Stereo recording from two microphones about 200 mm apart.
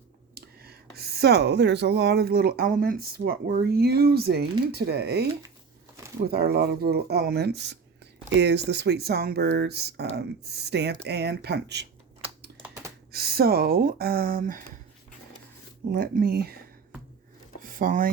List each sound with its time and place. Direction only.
0.3 s speech: 50° right (ahead or behind)
6.2 s speech: 50° right (ahead or behind)
13.1 s speech: 50° right (ahead or behind)
15.9 s speech: 45° right (ahead or behind)
17.6 s a sound: 45° right (ahead or behind)